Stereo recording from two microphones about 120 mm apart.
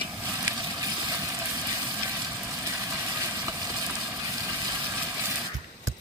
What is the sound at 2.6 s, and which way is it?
Vehicle, 25° right (ahead or behind).